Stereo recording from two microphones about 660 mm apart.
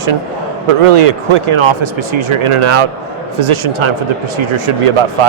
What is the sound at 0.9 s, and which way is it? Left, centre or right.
Speech, right.